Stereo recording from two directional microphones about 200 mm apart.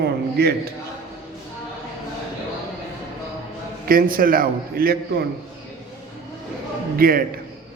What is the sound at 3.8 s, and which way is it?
A man's voice, 45° right (ahead or behind).